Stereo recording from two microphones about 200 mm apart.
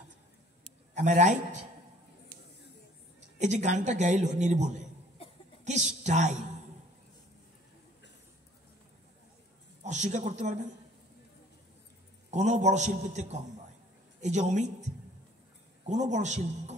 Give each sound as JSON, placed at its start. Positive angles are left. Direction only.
{"t": 0.9, "sound": "speech", "side_deg": -35}
{"t": 3.3, "sound": "speech", "side_deg": -35}
{"t": 5.7, "sound": "speech", "side_deg": -35}
{"t": 9.8, "sound": "speech", "side_deg": -35}
{"t": 12.3, "sound": "speech", "side_deg": -35}
{"t": 15.9, "sound": "speech", "side_deg": -35}